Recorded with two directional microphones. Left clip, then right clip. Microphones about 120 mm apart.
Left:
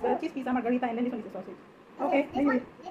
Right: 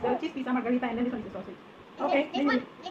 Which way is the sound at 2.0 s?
20° left (ahead or behind).